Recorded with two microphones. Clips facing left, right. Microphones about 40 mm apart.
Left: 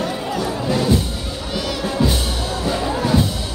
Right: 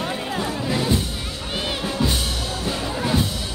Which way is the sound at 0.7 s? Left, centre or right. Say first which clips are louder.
Left 5 dB; centre.